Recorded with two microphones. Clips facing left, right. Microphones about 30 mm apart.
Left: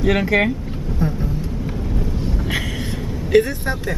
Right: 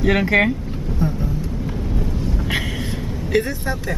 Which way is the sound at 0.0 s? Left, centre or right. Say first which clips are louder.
Right 1 dB; centre.